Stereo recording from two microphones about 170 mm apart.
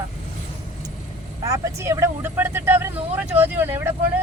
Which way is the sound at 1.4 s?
20° right (ahead or behind).